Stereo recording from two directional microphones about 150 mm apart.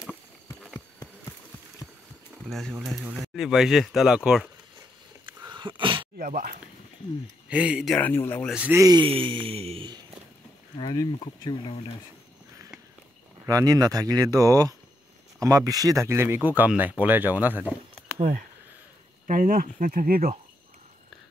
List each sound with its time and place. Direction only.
0.0 s clip-clop: centre (ahead or behind)
2.4 s speech: centre (ahead or behind)
5.5 s a sound: 30° right (ahead or behind)
6.1 s speech: 70° right (ahead or behind)
7.4 s speech: 10° right (ahead or behind)
7.9 s speech: 15° left (ahead or behind)
8.5 s speech: 5° right (ahead or behind)
8.7 s speech: 25° right (ahead or behind)
9.0 s a sound: 35° right (ahead or behind)
10.8 s speech: 30° left (ahead or behind)
13.5 s speech: 25° right (ahead or behind)
19.2 s speech: 65° right (ahead or behind)